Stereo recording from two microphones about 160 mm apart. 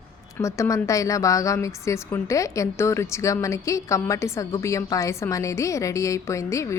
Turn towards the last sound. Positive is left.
turn(degrees=20)  # may be behind; listen again after turning